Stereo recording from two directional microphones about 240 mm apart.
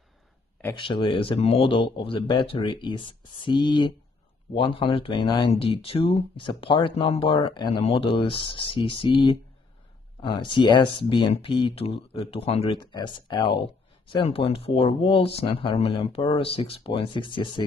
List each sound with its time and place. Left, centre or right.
0.7 s speech: left